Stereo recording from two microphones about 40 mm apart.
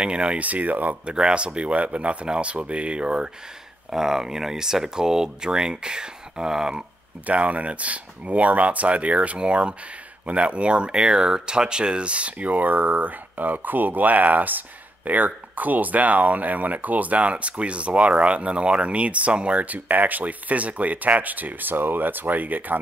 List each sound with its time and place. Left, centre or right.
0.0 s speech: right
0.4 s speech: right
1.0 s speech: right
3.9 s speech: centre
7.2 s speech: right
19.6 s speech: right